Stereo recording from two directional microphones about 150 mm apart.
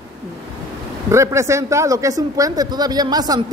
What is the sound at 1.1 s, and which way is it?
Speech, 20° right (ahead or behind).